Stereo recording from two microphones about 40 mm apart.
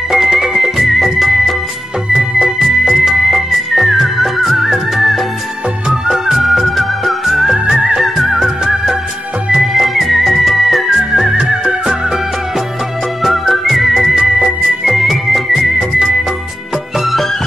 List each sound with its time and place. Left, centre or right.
0.1 s music: centre
2.9 s music: centre
7.5 s music: right
8.2 s music of bollywood: centre
9.5 s music: centre
11.0 s music: centre
13.2 s music: centre
17.0 s music: centre